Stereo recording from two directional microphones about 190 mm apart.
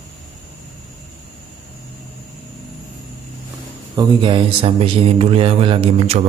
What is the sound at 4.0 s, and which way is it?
Speech, 25° right (ahead or behind).